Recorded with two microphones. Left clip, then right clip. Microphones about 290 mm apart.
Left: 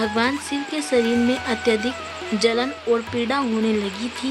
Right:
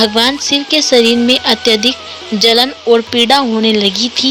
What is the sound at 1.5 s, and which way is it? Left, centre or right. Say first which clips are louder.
Speech: right 10 dB; centre.